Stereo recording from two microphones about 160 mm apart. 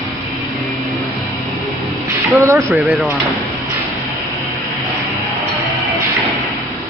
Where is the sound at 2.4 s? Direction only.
15° right (ahead or behind).